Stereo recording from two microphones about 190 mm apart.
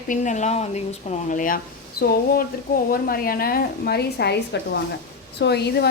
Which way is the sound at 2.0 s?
55° left (ahead or behind).